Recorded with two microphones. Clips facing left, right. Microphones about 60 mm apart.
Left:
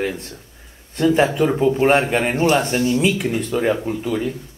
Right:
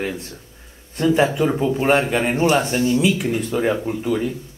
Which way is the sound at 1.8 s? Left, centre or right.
Centre.